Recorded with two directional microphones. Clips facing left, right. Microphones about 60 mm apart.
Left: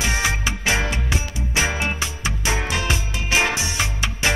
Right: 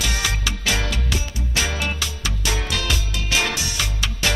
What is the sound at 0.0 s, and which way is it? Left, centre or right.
Music, left.